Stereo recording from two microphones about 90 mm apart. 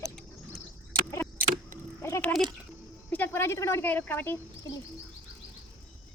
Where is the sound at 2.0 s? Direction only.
30° left (ahead or behind).